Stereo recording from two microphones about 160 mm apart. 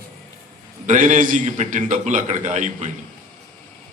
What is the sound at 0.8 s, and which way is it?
A man's voice, 55° right (ahead or behind).